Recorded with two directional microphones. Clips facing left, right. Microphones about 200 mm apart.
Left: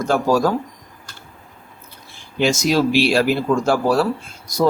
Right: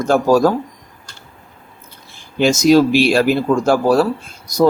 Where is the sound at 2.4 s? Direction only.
45° right (ahead or behind).